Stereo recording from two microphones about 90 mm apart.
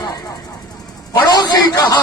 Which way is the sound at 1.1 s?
45° left (ahead or behind).